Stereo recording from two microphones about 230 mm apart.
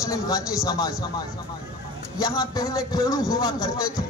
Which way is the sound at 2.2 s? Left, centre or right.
Centre.